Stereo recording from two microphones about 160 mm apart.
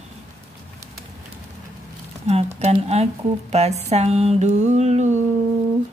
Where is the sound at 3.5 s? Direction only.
45° right (ahead or behind).